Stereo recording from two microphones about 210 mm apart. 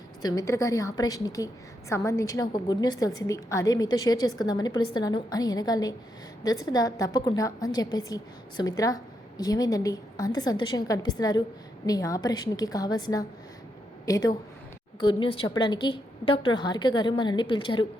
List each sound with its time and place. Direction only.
0.2 s a woman's voice: 15° left (ahead or behind)